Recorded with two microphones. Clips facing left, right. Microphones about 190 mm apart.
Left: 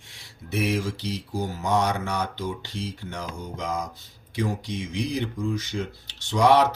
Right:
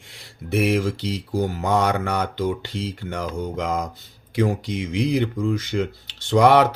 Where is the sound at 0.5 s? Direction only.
60° right (ahead or behind).